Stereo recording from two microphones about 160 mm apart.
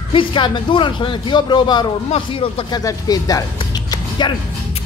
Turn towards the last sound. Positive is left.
turn(degrees=30)  # may be behind; listen again after turning